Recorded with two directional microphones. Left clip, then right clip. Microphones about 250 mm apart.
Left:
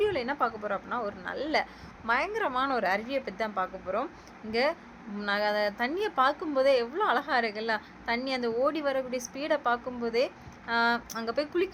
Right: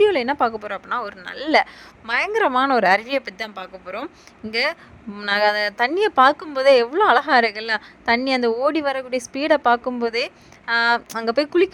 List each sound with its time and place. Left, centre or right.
0.0 s speech: right
4.5 s speech: right